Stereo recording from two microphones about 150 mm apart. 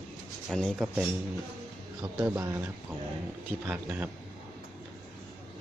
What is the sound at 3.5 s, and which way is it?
Speech, 10° right (ahead or behind).